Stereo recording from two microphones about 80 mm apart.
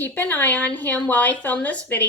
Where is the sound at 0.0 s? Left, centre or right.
Left.